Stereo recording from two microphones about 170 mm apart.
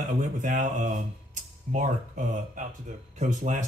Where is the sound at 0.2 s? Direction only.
45° right (ahead or behind).